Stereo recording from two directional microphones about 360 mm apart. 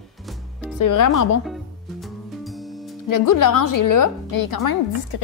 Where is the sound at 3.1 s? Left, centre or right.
Left.